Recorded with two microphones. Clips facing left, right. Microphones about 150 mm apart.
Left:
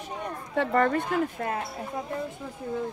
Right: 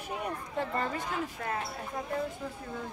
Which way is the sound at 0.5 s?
70° left (ahead or behind).